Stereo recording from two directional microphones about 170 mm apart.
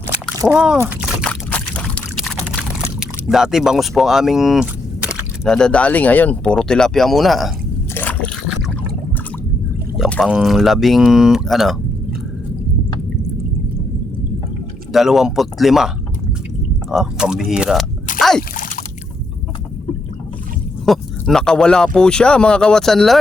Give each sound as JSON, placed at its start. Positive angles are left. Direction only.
{"t": 0.1, "sound": "a sound", "side_deg": -5}
{"t": 1.3, "sound": "pour", "side_deg": 10}
{"t": 7.9, "sound": "a sound", "side_deg": 10}
{"t": 10.2, "sound": "speech", "side_deg": -5}
{"t": 14.9, "sound": "speech", "side_deg": 0}
{"t": 16.9, "sound": "speech", "side_deg": -5}
{"t": 18.2, "sound": "splash", "side_deg": 0}
{"t": 18.5, "sound": "a sound", "side_deg": 50}
{"t": 20.8, "sound": "speech", "side_deg": 0}